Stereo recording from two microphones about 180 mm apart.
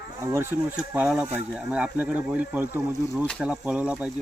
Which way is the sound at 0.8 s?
5° right (ahead or behind).